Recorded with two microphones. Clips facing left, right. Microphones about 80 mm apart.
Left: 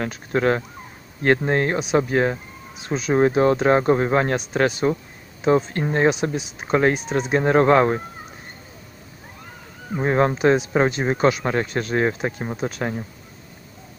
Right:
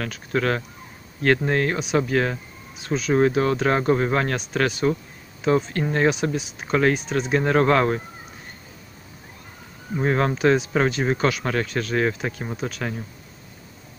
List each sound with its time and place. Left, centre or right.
0.0 s speech: left
9.9 s speech: centre